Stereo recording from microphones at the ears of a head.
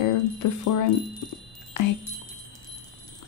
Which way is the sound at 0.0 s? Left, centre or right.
Left.